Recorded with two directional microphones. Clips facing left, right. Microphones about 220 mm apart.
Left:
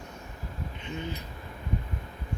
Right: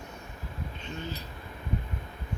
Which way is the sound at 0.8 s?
15° left (ahead or behind).